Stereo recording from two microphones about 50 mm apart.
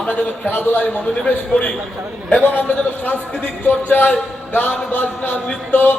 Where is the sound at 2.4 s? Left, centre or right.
Left.